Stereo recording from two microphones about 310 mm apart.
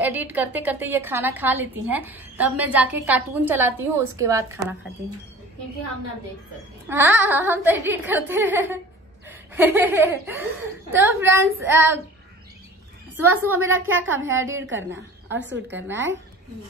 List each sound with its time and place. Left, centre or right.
0.0 s a woman's voice: centre
6.9 s speech: centre
13.2 s a woman's voice: right